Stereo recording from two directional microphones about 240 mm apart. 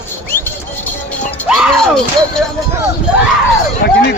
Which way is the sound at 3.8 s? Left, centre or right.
Left.